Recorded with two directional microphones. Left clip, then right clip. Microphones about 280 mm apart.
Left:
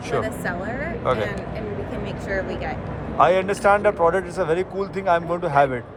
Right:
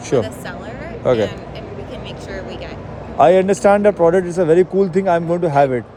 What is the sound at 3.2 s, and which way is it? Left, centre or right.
Speech, right.